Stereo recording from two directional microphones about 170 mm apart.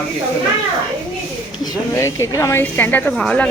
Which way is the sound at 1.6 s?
20° left (ahead or behind).